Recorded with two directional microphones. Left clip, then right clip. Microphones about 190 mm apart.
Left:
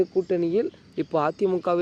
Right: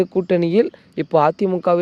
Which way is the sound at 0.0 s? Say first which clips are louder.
Right 5 dB; 55° right (ahead or behind).